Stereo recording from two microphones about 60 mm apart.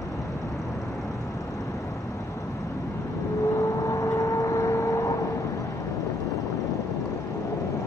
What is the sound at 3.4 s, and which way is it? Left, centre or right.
Vehicle, left.